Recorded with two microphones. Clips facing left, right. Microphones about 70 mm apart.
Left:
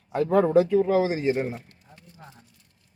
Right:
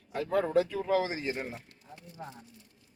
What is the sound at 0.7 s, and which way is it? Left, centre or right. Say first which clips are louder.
Speech: left 8 dB; centre.